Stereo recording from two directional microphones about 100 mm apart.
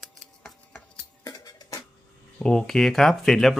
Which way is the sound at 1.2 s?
35° left (ahead or behind).